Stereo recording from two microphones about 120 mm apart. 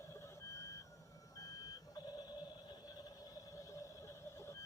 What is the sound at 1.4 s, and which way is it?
Alarm clock, 30° left (ahead or behind).